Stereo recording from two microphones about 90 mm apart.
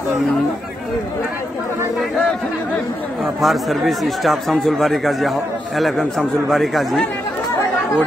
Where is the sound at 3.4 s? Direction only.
Centre (ahead or behind).